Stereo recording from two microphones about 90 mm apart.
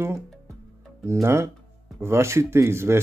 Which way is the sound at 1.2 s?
30° right (ahead or behind).